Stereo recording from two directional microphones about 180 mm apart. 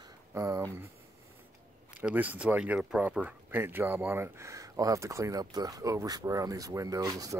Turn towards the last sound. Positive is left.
turn(degrees=-20)  # may be behind; listen again after turning